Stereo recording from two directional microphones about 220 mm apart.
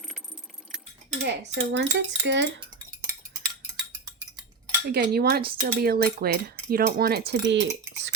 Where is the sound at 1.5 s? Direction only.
50° right (ahead or behind).